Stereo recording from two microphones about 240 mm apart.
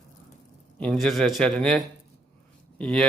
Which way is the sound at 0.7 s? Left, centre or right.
Centre.